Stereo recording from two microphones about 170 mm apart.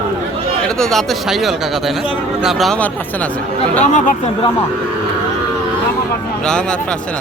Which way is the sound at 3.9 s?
45° left (ahead or behind).